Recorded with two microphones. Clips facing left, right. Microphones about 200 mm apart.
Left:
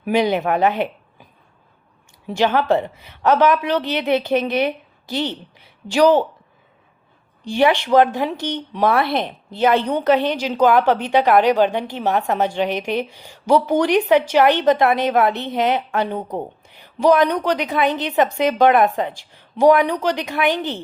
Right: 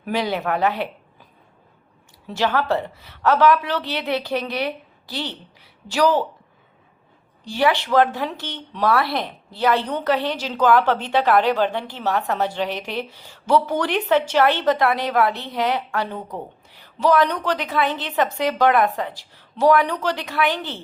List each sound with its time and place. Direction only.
0.0 s speech: 20° left (ahead or behind)
2.2 s speech: 20° left (ahead or behind)
7.4 s a woman's voice: 20° left (ahead or behind)